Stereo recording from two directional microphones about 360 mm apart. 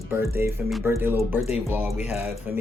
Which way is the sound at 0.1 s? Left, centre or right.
Centre.